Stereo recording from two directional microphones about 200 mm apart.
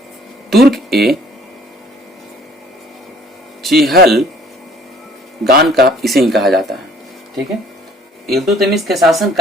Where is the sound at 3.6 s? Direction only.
Centre (ahead or behind).